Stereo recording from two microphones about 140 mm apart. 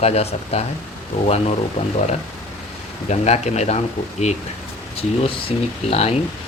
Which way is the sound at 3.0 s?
50° left (ahead or behind).